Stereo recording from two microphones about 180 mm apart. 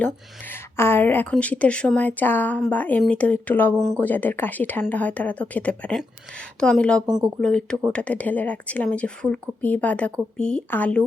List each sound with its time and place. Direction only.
0.0 s speech: 10° left (ahead or behind)
7.0 s speech: 20° right (ahead or behind)
7.4 s speech: 5° left (ahead or behind)